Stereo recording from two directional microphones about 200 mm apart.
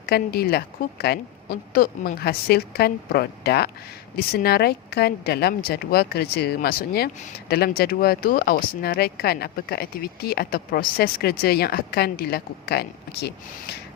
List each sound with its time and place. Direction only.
0.0 s speech: 50° left (ahead or behind)